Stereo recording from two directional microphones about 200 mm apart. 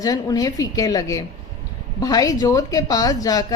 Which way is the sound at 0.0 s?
20° left (ahead or behind).